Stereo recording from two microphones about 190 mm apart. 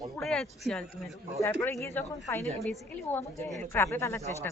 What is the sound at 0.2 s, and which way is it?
Speech, centre (ahead or behind).